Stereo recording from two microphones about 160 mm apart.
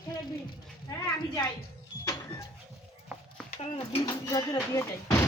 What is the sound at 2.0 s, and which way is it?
Vehicle, 25° left (ahead or behind).